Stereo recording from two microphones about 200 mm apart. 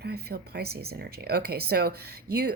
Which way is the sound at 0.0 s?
50° right (ahead or behind).